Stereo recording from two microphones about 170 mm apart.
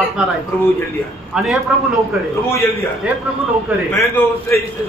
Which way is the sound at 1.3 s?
Centre (ahead or behind).